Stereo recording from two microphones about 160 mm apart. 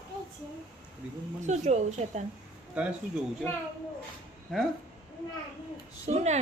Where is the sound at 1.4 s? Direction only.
45° right (ahead or behind).